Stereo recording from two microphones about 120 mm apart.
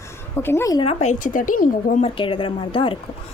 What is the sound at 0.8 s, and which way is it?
Speech, 70° left (ahead or behind).